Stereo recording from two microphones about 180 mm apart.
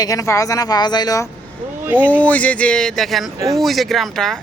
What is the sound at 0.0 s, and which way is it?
Speech, 20° left (ahead or behind).